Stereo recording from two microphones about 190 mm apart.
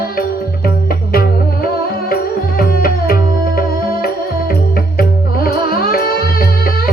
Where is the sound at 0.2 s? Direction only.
50° left (ahead or behind).